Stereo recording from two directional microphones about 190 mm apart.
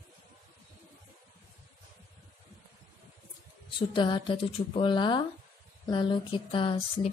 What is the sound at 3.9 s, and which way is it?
Speech, 25° left (ahead or behind).